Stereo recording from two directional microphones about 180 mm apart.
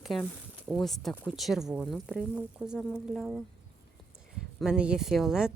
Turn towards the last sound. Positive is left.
turn(degrees=-5)  # may be behind; listen again after turning